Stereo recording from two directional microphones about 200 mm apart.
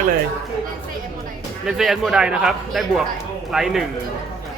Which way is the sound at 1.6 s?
Centre (ahead or behind).